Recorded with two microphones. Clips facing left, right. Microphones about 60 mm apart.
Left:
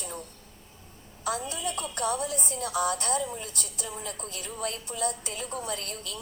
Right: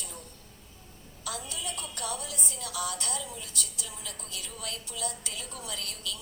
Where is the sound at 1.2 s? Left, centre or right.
Left.